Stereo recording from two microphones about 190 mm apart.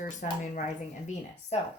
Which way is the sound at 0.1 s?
40° left (ahead or behind).